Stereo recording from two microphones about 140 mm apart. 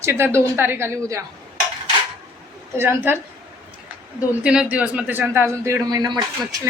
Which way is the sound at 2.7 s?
15° right (ahead or behind).